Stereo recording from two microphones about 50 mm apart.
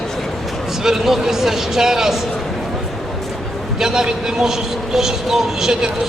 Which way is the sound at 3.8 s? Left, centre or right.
Centre.